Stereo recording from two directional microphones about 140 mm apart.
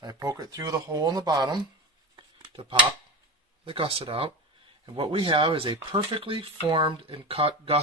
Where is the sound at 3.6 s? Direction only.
40° right (ahead or behind).